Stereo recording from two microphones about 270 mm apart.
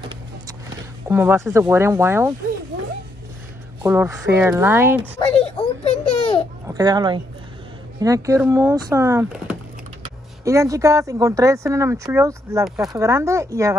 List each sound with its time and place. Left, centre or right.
1.0 s speech: centre
3.8 s speech: centre
5.3 s a sound: left
6.7 s speech: centre